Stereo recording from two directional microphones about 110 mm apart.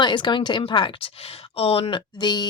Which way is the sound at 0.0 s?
45° left (ahead or behind).